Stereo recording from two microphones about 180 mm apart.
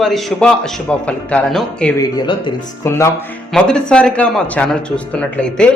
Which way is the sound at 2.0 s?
25° left (ahead or behind).